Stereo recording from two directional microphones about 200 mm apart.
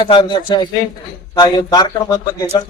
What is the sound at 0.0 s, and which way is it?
Speech, 25° left (ahead or behind).